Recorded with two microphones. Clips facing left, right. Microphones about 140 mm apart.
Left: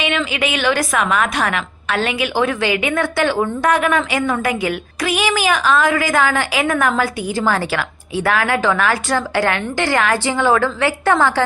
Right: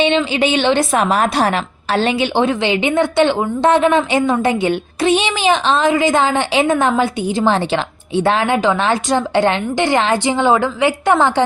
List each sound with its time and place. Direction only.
0.0 s a woman's voice: 25° right (ahead or behind)